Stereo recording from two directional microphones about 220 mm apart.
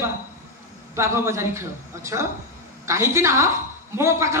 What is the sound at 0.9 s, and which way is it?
A man's voice, 10° right (ahead or behind).